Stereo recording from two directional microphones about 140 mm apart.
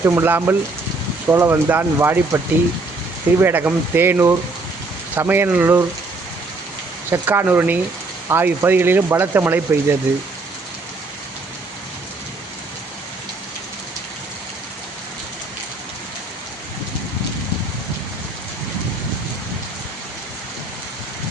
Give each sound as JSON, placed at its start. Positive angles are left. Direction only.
{"t": 0.0, "sound": "speech", "side_deg": -15}
{"t": 3.4, "sound": "speech", "side_deg": -15}
{"t": 7.1, "sound": "speech", "side_deg": -15}